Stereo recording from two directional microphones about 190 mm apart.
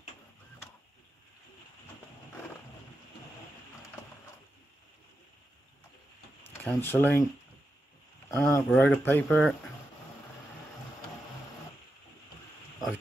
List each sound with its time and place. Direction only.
6.4 s speech: 10° left (ahead or behind)
8.3 s speech: 15° left (ahead or behind)